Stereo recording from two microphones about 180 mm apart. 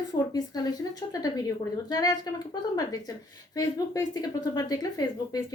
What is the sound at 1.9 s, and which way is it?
Speech, 20° left (ahead or behind).